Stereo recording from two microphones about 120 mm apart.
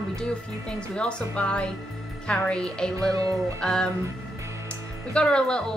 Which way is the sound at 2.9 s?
25° right (ahead or behind).